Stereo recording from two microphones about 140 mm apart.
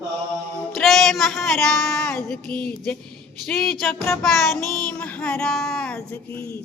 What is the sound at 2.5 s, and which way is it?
Music, 5° left (ahead or behind).